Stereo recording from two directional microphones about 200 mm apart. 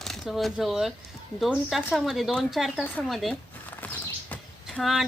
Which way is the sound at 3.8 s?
10° left (ahead or behind).